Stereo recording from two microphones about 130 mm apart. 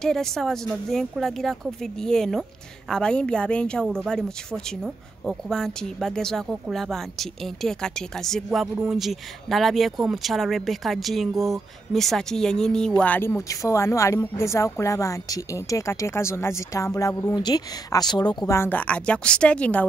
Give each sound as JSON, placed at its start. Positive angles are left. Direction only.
{"t": 0.0, "sound": "speech", "side_deg": 5}
{"t": 13.5, "sound": "speech", "side_deg": 25}
{"t": 18.5, "sound": "speech", "side_deg": 15}